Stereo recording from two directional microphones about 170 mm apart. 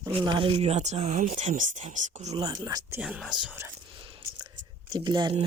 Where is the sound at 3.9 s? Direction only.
30° right (ahead or behind).